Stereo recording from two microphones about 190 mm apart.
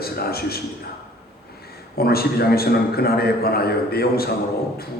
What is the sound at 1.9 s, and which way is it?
A man's voice, 55° left (ahead or behind).